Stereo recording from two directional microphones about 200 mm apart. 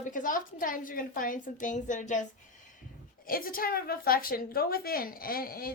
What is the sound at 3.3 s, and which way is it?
A woman's voice, 45° left (ahead or behind).